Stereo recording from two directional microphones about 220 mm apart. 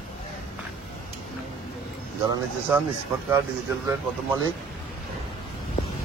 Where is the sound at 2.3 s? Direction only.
10° right (ahead or behind).